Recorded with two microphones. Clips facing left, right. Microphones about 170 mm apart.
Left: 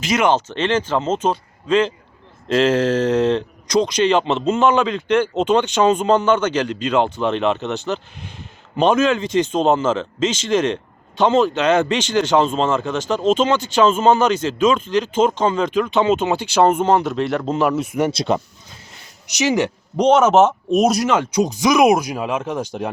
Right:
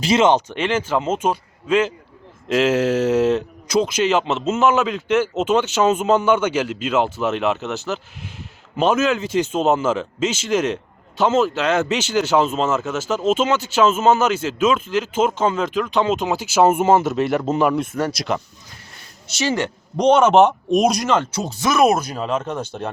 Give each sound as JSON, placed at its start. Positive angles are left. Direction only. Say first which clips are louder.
{"t": 0.0, "sound": "speech", "louder": "right 2 dB", "side_deg": -25}
{"t": 18.1, "sound": "speech", "louder": "left 4 dB", "side_deg": 25}
{"t": 19.3, "sound": "speech", "louder": "left 3 dB", "side_deg": 15}